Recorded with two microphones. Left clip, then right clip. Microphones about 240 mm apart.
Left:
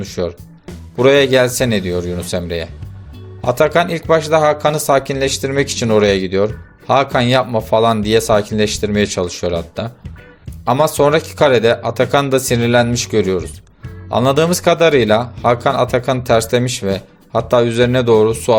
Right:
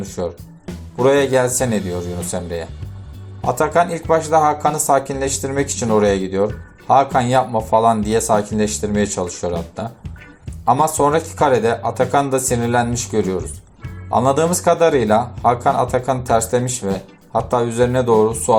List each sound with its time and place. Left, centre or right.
0.2 s speech: left
3.6 s speech: left
4.0 s speech: left
4.3 s speech: left
4.6 s speech: left
5.4 s speech: left
5.8 s speech: left
10.9 s speech: left